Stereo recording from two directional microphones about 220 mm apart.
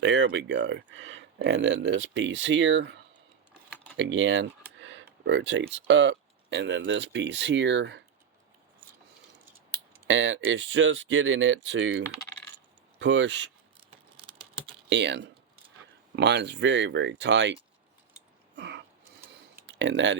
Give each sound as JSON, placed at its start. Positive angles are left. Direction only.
{"t": 0.0, "sound": "speech", "side_deg": -55}
{"t": 3.9, "sound": "computer keyboard", "side_deg": -55}
{"t": 5.2, "sound": "speech", "side_deg": -55}
{"t": 10.1, "sound": "speech", "side_deg": -60}
{"t": 14.8, "sound": "speech", "side_deg": -55}
{"t": 18.5, "sound": "a sound", "side_deg": -50}
{"t": 19.6, "sound": "speech", "side_deg": -55}